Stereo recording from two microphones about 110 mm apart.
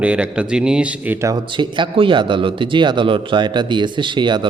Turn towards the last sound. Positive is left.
turn(degrees=-45)  # may be behind; listen again after turning